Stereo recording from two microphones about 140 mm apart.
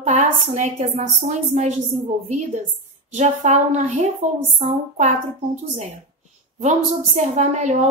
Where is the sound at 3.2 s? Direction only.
55° right (ahead or behind).